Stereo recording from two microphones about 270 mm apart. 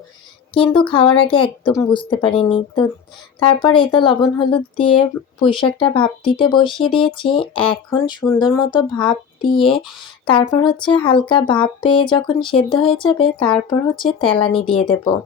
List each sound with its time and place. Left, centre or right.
0.5 s speech: centre